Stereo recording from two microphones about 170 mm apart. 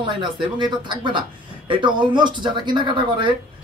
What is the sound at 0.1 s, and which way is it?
Speech, 25° right (ahead or behind).